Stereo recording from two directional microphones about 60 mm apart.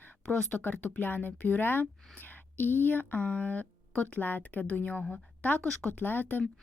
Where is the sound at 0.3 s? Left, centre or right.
Left.